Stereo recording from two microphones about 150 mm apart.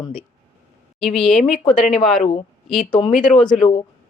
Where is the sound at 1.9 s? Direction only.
Centre (ahead or behind).